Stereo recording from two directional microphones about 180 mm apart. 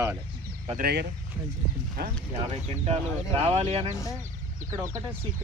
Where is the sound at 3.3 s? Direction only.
35° right (ahead or behind).